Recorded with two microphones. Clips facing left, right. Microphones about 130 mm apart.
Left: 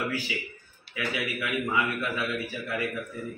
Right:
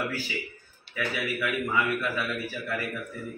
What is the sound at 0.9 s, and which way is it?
A man's voice, 15° left (ahead or behind).